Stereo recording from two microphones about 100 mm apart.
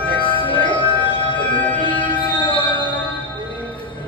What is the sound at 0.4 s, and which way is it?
Music, 60° left (ahead or behind).